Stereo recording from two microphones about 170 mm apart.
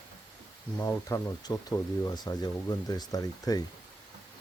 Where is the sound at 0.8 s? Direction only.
15° left (ahead or behind).